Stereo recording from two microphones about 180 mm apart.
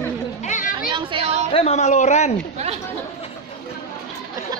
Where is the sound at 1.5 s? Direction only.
35° left (ahead or behind).